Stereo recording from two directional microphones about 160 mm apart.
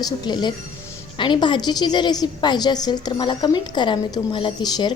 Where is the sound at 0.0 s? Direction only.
25° left (ahead or behind).